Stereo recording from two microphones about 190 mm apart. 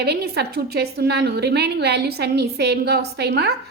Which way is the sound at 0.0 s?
60° right (ahead or behind).